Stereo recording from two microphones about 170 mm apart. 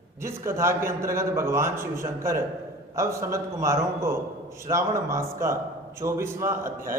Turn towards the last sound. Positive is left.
turn(degrees=-15)  # may be behind; listen again after turning